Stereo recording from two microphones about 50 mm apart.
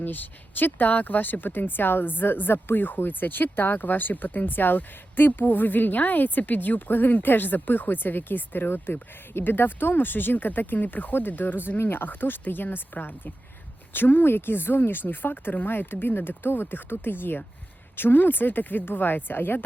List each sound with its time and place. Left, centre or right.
0.0 s speech: left